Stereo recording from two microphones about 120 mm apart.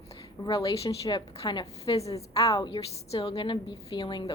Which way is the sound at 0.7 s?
50° left (ahead or behind).